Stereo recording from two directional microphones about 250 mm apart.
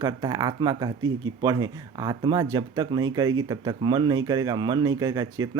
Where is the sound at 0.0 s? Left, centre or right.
Centre.